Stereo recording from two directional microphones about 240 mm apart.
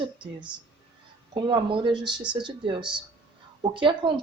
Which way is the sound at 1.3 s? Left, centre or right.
Centre.